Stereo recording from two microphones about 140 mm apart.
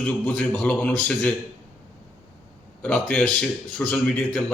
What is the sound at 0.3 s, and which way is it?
A man's voice, 5° left (ahead or behind).